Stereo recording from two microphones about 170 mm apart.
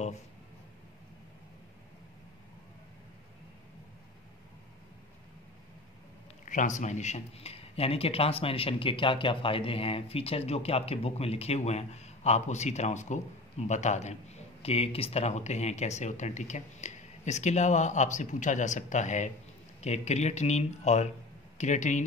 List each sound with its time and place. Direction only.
6.4 s speech: 50° left (ahead or behind)